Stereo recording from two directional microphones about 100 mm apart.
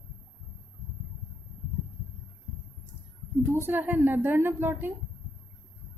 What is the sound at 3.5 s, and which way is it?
A woman's voice, 25° right (ahead or behind).